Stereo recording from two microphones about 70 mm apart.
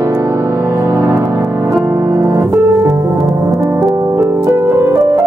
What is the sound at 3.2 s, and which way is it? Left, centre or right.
Music, centre.